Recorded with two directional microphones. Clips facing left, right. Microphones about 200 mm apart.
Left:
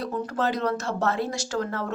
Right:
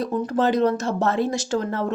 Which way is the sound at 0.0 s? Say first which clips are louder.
Right 5 dB; 20° right (ahead or behind).